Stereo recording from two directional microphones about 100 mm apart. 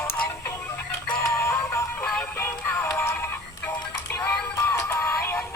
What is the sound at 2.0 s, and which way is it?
Music, 15° left (ahead or behind).